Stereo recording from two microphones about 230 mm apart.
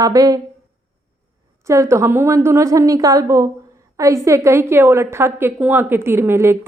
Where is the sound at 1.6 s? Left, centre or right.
Centre.